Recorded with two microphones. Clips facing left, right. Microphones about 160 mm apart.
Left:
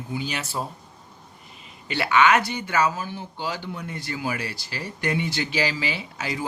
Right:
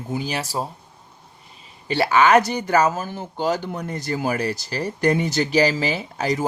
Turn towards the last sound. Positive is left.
turn(degrees=-40)  # may be behind; listen again after turning